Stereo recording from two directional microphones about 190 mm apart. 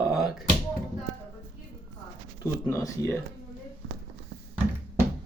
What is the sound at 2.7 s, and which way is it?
Speech, 15° left (ahead or behind).